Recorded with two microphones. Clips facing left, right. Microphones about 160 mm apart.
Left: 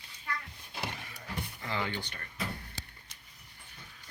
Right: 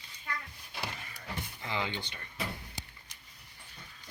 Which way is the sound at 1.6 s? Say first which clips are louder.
Even; 20° right (ahead or behind).